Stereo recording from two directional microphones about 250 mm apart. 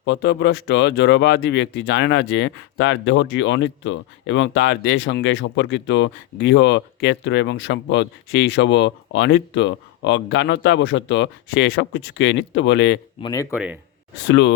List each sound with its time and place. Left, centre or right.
0.0 s speech: left
13.2 s speech: centre
14.3 s speech: left